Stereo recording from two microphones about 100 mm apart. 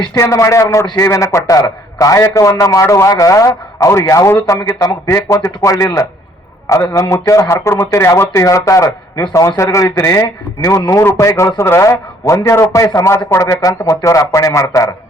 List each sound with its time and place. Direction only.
0.2 s a man's voice: 30° left (ahead or behind)